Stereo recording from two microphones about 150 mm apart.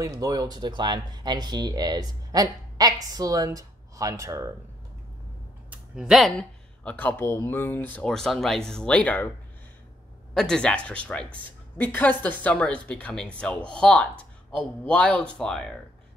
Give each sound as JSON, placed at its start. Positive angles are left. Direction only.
{"t": 0.0, "sound": "speech", "side_deg": -25}
{"t": 5.7, "sound": "speech", "side_deg": -5}
{"t": 10.3, "sound": "speech", "side_deg": 5}